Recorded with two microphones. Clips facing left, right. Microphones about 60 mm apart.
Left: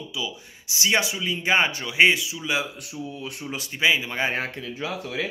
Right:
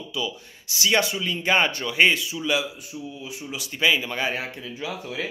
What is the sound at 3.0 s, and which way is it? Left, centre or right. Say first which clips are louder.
Speech: left 3 dB; left.